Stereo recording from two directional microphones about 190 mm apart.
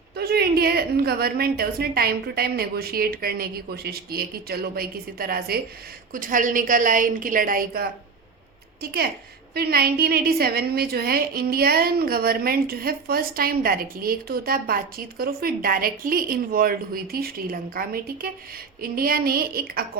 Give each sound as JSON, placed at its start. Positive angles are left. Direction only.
{"t": 0.2, "sound": "a woman's voice", "side_deg": -55}